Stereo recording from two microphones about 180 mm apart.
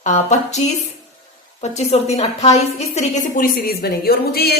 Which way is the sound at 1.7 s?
35° left (ahead or behind).